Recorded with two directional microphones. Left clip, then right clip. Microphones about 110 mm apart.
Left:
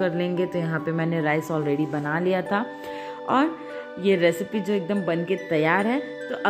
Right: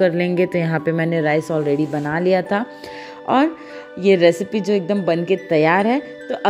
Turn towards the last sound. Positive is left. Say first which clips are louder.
# right 4 dB
turn(degrees=-45)  # may be behind; listen again after turning